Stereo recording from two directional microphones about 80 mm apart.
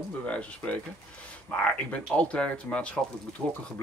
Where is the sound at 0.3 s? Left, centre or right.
Centre.